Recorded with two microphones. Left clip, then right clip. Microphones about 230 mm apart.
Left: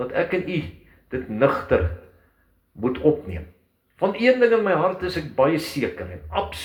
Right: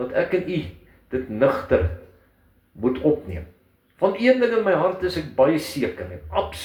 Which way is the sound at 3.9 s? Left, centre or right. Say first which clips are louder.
Even; left.